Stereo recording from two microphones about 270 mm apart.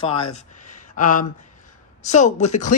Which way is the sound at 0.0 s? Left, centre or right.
Centre.